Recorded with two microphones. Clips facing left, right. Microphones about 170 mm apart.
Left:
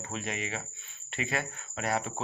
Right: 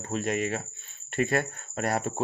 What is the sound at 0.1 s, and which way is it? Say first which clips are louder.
Speech: right 8 dB; 45° right (ahead or behind).